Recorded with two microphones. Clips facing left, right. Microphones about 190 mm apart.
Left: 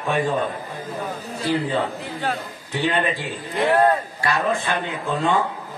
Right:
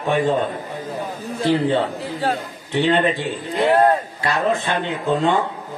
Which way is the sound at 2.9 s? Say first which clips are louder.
Right 5 dB; 20° right (ahead or behind).